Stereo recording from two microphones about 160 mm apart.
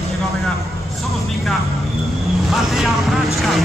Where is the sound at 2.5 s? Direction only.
Centre (ahead or behind).